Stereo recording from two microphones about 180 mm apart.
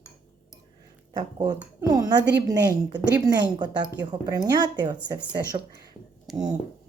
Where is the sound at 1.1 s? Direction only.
20° right (ahead or behind).